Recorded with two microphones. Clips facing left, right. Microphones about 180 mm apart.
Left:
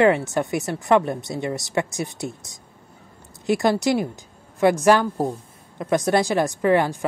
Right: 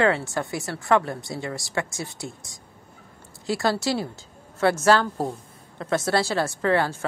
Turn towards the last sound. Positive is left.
turn(degrees=15)  # may be behind; listen again after turning